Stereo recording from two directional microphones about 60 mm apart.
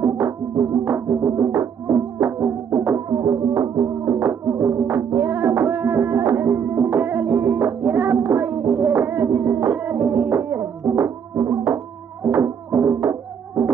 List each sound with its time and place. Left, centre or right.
0.0 s music: right
2.1 s music: right
3.1 s music: right
3.6 s music: right
4.0 s music: right
9.7 s music: right